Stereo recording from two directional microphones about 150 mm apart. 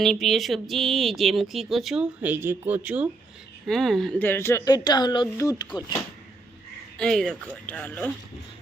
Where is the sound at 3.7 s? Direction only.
Centre (ahead or behind).